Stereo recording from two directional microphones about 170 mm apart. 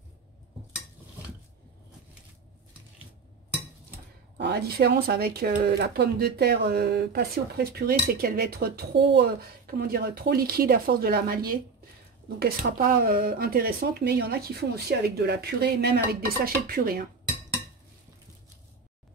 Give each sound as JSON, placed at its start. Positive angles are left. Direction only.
{"t": 4.4, "sound": "speech", "side_deg": -70}